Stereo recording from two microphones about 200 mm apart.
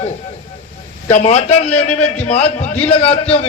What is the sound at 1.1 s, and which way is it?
A man's voice, 35° left (ahead or behind).